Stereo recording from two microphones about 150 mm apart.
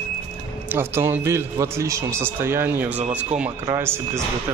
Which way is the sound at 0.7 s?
15° right (ahead or behind).